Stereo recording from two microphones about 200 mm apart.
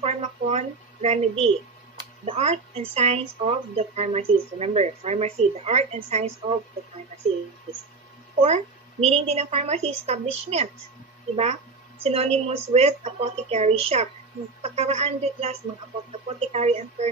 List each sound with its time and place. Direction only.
0.0 s a sound: 30° right (ahead or behind)
2.2 s a woman's voice: 30° right (ahead or behind)
8.4 s a woman's voice: 35° right (ahead or behind)
12.0 s a woman's voice: 30° right (ahead or behind)